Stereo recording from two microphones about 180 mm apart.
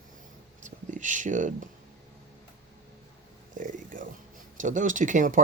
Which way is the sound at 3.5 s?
45° right (ahead or behind).